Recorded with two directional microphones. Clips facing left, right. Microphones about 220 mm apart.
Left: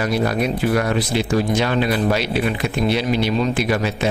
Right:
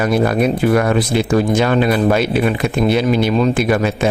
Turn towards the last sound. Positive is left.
turn(degrees=-50)  # may be behind; listen again after turning